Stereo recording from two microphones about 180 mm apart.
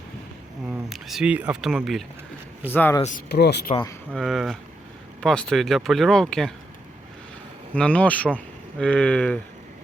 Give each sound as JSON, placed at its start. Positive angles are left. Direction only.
{"t": 0.9, "sound": "speech", "side_deg": 0}
{"t": 2.6, "sound": "speech", "side_deg": 10}
{"t": 3.2, "sound": "speech", "side_deg": 65}
{"t": 4.1, "sound": "speech", "side_deg": 0}
{"t": 7.7, "sound": "speech", "side_deg": 5}